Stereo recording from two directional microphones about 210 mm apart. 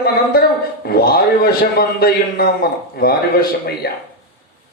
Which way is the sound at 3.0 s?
50° left (ahead or behind).